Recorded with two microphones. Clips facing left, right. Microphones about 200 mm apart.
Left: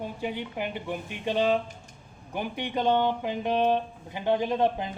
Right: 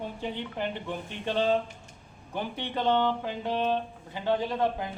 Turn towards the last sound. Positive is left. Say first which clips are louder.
# left 3 dB
turn(degrees=20)  # may be behind; listen again after turning